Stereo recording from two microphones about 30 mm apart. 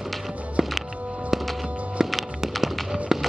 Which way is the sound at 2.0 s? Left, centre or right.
Centre.